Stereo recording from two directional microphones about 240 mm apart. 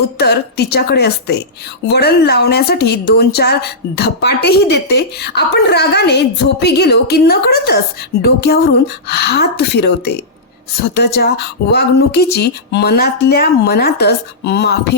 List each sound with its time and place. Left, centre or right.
0.2 s a woman's voice: left